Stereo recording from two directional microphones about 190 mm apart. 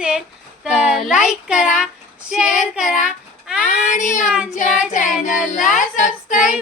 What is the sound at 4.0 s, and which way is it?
Speech, 40° left (ahead or behind).